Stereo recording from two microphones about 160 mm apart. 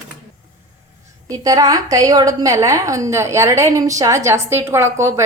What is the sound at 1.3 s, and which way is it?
A woman's voice, 20° right (ahead or behind).